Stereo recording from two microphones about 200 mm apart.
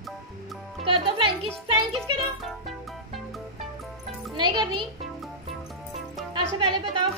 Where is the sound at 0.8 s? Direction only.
25° right (ahead or behind).